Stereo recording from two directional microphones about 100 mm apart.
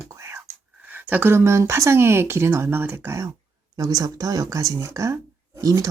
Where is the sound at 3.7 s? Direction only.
40° right (ahead or behind).